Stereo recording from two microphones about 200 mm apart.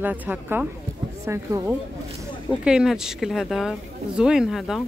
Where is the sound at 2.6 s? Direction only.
5° right (ahead or behind).